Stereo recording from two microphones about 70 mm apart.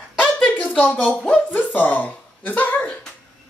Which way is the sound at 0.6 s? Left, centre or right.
Left.